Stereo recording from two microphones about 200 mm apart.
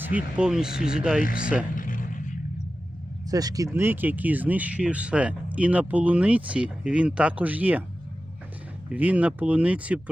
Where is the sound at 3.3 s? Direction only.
20° right (ahead or behind).